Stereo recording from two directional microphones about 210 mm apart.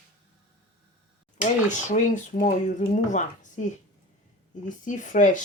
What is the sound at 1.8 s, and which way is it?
Speech, 35° left (ahead or behind).